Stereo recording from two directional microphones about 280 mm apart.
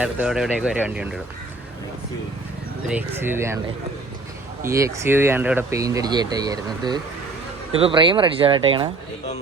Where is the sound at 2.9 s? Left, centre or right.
Centre.